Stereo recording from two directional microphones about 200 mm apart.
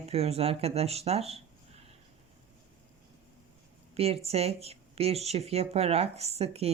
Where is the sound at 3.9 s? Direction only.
30° right (ahead or behind).